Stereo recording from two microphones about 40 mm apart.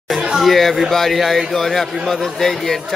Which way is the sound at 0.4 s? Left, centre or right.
Centre.